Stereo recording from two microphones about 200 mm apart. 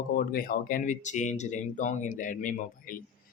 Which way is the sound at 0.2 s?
45° left (ahead or behind).